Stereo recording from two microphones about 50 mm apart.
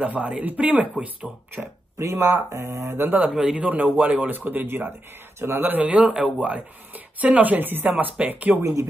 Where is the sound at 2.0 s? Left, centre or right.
Right.